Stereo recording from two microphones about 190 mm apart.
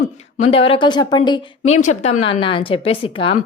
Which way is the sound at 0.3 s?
30° left (ahead or behind).